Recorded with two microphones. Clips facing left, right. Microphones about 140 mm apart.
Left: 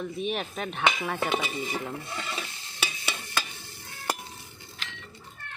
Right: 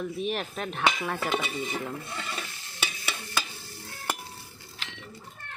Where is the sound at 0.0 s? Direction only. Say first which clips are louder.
Even; centre (ahead or behind).